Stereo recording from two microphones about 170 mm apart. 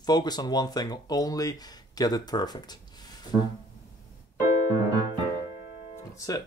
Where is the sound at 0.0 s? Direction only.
25° left (ahead or behind).